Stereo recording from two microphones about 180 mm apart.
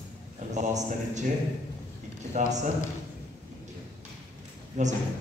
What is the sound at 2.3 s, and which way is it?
Speech, 40° right (ahead or behind).